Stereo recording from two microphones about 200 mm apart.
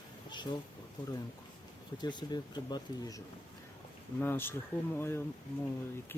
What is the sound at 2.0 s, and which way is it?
Speech, 20° left (ahead or behind).